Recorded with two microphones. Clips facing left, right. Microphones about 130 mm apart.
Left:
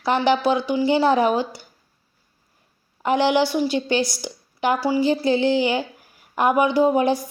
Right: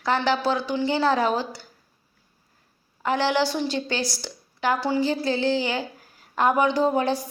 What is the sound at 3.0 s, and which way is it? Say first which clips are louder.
A woman's voice: left 4 dB; 15° left (ahead or behind).